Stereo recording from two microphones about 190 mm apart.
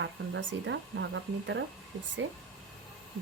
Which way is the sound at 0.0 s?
70° right (ahead or behind).